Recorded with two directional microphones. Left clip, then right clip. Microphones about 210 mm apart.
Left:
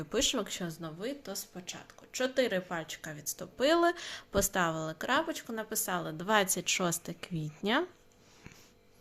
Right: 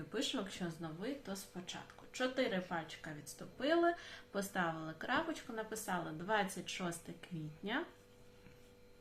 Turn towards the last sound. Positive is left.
turn(degrees=60)  # may be behind; listen again after turning